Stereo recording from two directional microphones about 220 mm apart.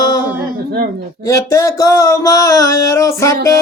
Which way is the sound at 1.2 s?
15° left (ahead or behind).